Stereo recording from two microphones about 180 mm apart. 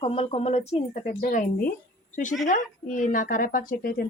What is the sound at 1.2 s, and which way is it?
Speech, 50° left (ahead or behind).